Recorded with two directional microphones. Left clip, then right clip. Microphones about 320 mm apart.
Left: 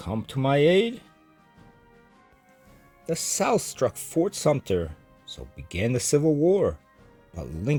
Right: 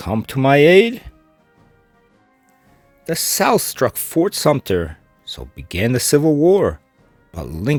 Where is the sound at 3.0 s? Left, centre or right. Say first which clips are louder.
Right 8 dB; right.